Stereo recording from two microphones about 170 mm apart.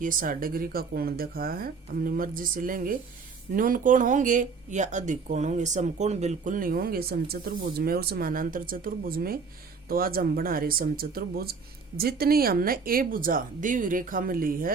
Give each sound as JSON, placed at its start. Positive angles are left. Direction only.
{"t": 0.0, "sound": "speech", "side_deg": -55}